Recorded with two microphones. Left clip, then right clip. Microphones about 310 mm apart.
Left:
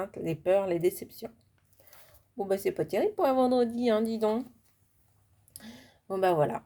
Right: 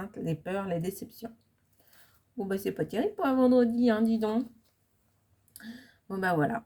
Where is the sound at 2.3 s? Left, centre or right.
Left.